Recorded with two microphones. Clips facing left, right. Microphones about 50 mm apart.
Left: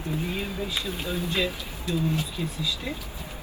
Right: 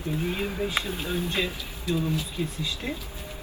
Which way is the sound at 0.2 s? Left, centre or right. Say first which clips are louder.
Right 2 dB; right.